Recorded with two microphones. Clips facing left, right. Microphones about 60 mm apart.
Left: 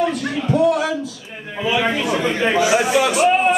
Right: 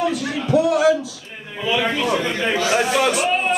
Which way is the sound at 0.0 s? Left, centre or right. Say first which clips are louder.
Left 2 dB; centre.